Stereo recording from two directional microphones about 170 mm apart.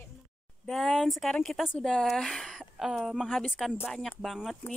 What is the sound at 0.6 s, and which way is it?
Speech, centre (ahead or behind).